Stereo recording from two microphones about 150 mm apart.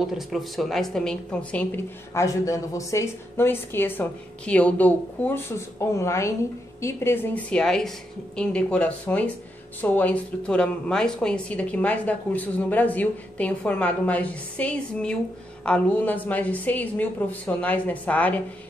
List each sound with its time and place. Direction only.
0.0 s a woman's voice: centre (ahead or behind)
2.2 s speech: 20° left (ahead or behind)